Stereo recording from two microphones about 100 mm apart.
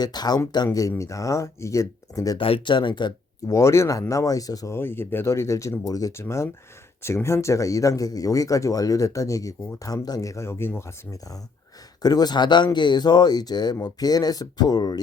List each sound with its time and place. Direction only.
0.0 s speech: 45° left (ahead or behind)
2.4 s speech: 55° left (ahead or behind)
3.4 s speech: 30° left (ahead or behind)
4.8 s speech: 20° left (ahead or behind)
12.0 s speech: 45° left (ahead or behind)